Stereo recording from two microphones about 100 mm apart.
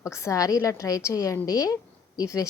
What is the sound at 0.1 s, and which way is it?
A woman's voice, 30° left (ahead or behind).